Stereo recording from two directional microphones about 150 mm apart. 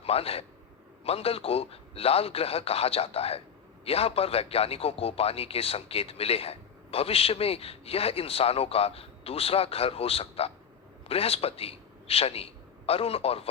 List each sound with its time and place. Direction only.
0.0 s a man's voice: 40° left (ahead or behind)